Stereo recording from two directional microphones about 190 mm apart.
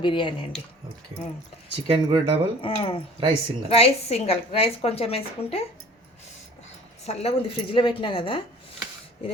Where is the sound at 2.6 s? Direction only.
30° left (ahead or behind).